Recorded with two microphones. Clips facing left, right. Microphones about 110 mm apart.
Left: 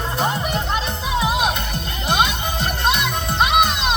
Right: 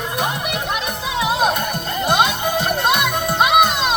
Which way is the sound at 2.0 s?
50° right (ahead or behind).